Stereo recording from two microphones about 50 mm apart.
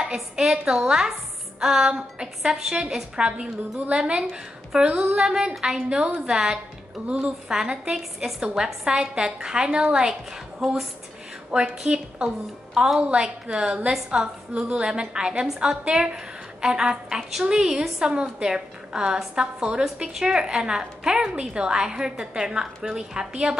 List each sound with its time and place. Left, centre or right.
0.0 s a woman's voice: centre
10.6 s speech: centre
11.8 s a woman's voice: centre